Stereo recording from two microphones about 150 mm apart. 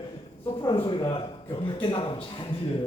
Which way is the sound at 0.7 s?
35° left (ahead or behind).